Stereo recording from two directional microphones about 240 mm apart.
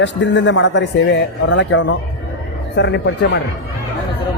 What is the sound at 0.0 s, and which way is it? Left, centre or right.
Speech, left.